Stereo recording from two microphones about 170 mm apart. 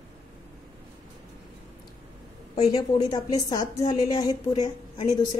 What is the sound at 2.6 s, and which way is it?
A woman's voice, 20° left (ahead or behind).